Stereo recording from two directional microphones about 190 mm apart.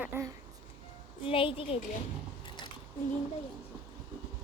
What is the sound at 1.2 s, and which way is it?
Speech, 30° left (ahead or behind).